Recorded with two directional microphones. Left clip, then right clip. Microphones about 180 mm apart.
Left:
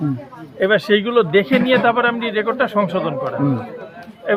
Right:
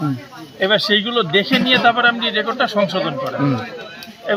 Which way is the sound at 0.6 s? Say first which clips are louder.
Even; 20° left (ahead or behind).